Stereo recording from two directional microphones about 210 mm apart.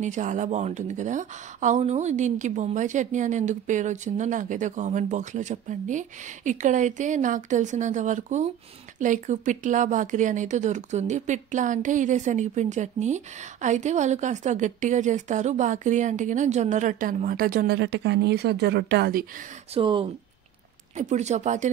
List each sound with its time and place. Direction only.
0.0 s speech: 35° right (ahead or behind)
19.7 s speech: 25° right (ahead or behind)